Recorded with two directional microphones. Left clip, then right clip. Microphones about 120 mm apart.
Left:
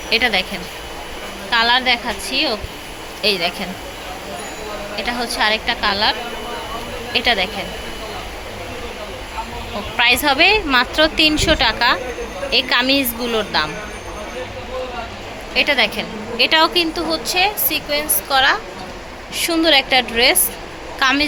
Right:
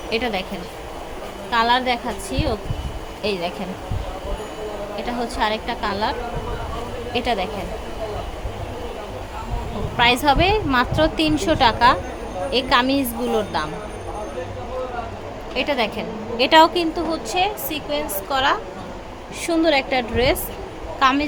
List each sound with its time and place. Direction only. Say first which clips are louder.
0.1 s a woman's voice: left 7 dB; 5° right (ahead or behind)
1.5 s a woman's voice: left 3 dB; 10° right (ahead or behind)
4.9 s a woman's voice: left 4 dB; 5° right (ahead or behind)
10.2 s a woman's voice: left 4 dB; 15° right (ahead or behind)
15.5 s a woman's voice: left 6 dB; 10° right (ahead or behind)
16.4 s a woman's voice: even; 25° right (ahead or behind); by 18.0 s centre (ahead or behind)
18.3 s a woman's voice: left 5 dB; 15° right (ahead or behind)